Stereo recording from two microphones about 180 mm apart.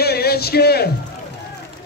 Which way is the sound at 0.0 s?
60° left (ahead or behind).